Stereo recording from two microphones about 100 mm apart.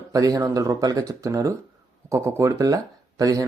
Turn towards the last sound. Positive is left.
turn(degrees=-35)  # may be behind; listen again after turning